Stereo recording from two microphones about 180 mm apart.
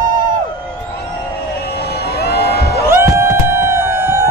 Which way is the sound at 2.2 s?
65° left (ahead or behind).